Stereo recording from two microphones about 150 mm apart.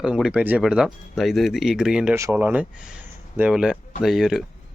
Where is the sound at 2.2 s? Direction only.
20° right (ahead or behind).